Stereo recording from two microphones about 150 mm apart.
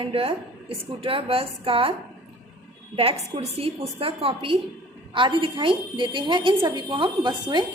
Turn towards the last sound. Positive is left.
turn(degrees=-30)  # may be behind; listen again after turning